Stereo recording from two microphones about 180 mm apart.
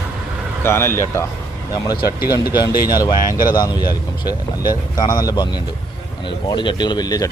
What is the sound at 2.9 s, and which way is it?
Speech, 20° left (ahead or behind).